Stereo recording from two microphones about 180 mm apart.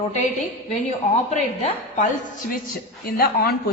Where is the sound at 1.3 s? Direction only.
45° left (ahead or behind).